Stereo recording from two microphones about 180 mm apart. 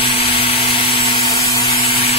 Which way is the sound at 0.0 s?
30° left (ahead or behind).